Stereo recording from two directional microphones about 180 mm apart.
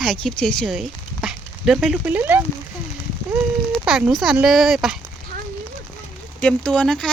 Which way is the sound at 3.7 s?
Centre (ahead or behind).